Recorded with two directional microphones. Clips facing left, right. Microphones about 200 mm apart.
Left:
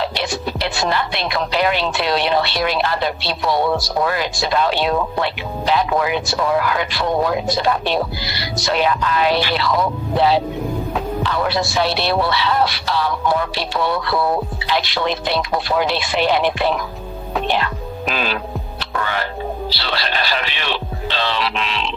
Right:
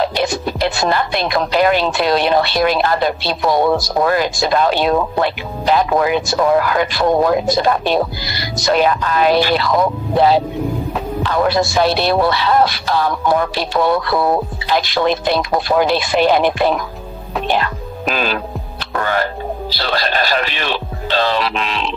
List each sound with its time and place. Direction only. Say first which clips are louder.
0.0 s speech: right 5 dB; 45° right (ahead or behind)
18.8 s music: right 5 dB; 45° right (ahead or behind)
19.7 s speech: right 4 dB; 45° right (ahead or behind)